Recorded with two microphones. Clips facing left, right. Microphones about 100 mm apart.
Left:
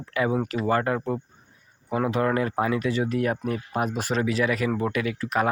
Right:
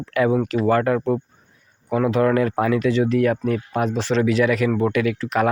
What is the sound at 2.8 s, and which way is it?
Speech, 40° left (ahead or behind).